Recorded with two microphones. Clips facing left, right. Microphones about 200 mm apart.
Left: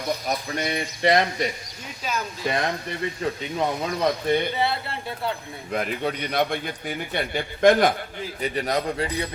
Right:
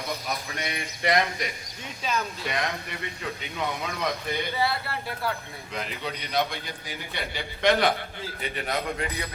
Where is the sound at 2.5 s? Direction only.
30° left (ahead or behind).